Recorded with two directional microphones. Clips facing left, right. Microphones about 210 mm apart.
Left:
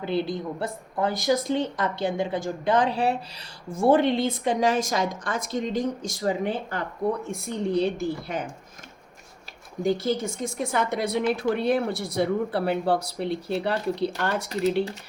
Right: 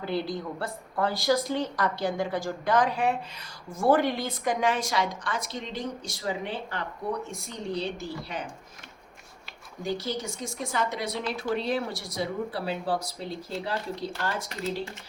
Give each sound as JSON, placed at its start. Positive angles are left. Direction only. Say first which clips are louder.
{"t": 0.0, "sound": "a woman's voice", "louder": "left 3 dB", "side_deg": 20}
{"t": 4.7, "sound": "speech", "louder": "left 3 dB", "side_deg": 45}
{"t": 7.3, "sound": "speech", "louder": "left 7 dB", "side_deg": 55}
{"t": 9.8, "sound": "speech", "louder": "left 7 dB", "side_deg": 55}